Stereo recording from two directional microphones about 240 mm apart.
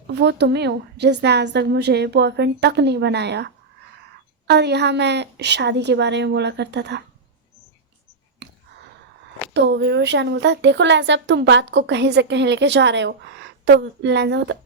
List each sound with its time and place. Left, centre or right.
0.1 s speech: right
8.4 s a sound: right
9.5 s speech: right